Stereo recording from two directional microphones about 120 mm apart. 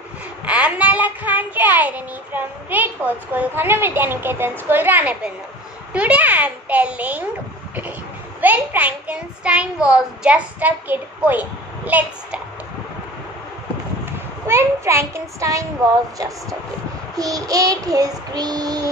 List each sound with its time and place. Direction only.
0.5 s a child's voice: 10° right (ahead or behind)
8.4 s a child's voice: 15° right (ahead or behind)
14.5 s a child's voice: 20° right (ahead or behind)
17.1 s child singing: 30° right (ahead or behind)